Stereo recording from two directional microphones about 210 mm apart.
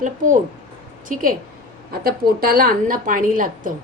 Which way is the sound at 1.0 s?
40° right (ahead or behind).